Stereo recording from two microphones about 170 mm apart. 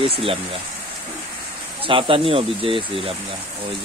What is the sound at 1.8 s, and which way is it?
Speech, 30° right (ahead or behind).